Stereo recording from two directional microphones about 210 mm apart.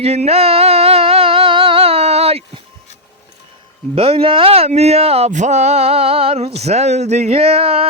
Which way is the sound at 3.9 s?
25° right (ahead or behind).